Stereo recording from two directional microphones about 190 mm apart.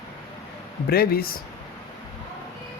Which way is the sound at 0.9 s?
55° left (ahead or behind).